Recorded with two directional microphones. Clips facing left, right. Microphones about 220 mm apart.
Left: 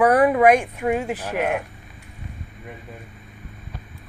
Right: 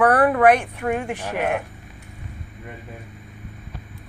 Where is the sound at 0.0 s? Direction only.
10° left (ahead or behind).